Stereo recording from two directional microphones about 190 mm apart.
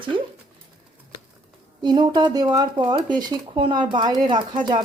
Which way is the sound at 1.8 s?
25° right (ahead or behind).